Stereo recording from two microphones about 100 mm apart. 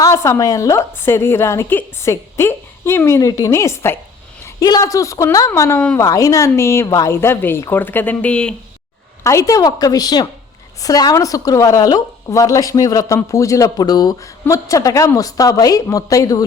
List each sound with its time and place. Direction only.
0.0 s a woman's voice: 30° left (ahead or behind); by 8.5 s 10° left (ahead or behind)
9.2 s a woman's voice: 35° left (ahead or behind)